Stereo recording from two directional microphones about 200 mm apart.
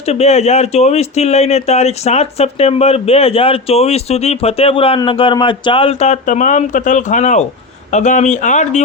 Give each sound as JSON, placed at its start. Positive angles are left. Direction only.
{"t": 0.0, "sound": "speech", "side_deg": 30}